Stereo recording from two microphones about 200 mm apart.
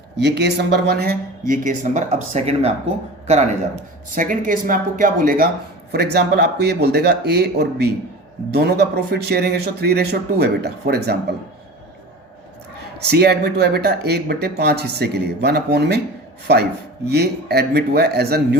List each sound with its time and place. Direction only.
0.2 s speech: 60° right (ahead or behind); by 2.7 s 30° right (ahead or behind)
4.1 s speech: 40° right (ahead or behind)
13.0 s speech: 55° right (ahead or behind)
17.1 s speech: 55° right (ahead or behind)